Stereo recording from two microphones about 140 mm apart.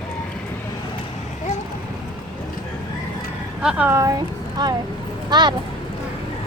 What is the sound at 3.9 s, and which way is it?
Speech, 20° right (ahead or behind).